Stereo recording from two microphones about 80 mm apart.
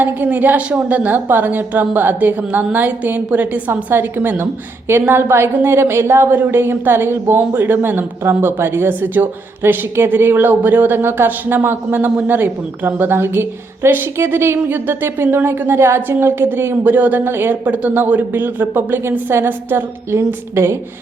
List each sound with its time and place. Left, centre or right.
0.0 s a woman's voice: right